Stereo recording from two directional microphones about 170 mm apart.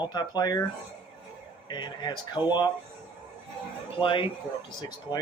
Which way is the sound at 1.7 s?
25° left (ahead or behind).